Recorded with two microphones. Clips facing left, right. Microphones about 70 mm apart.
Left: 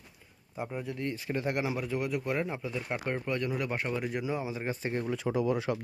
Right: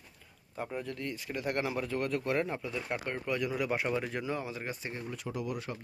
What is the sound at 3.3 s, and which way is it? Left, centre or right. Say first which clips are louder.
Speech: right 2 dB; centre.